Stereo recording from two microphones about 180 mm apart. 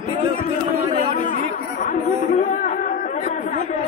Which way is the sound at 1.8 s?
45° left (ahead or behind).